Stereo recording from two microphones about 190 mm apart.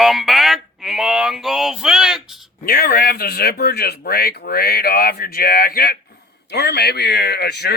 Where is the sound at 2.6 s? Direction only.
50° left (ahead or behind).